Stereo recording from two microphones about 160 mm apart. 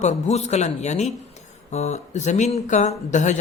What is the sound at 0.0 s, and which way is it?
A man's voice, 45° left (ahead or behind).